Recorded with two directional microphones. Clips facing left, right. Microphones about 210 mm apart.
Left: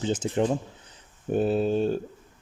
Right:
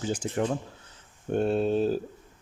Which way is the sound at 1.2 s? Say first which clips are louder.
Left 1 dB; 5° left (ahead or behind).